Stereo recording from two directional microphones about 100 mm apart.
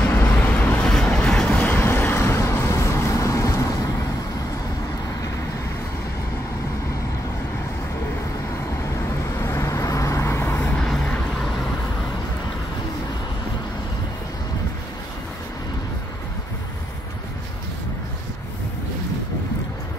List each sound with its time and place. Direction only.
0.0 s vehicle: 20° left (ahead or behind)
0.8 s vehicle: 5° left (ahead or behind); by 3.7 s 35° left (ahead or behind)
9.4 s vehicle: 30° left (ahead or behind)
10.8 s vehicle: 5° left (ahead or behind)